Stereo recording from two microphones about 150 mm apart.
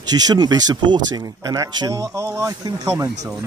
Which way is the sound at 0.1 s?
25° right (ahead or behind).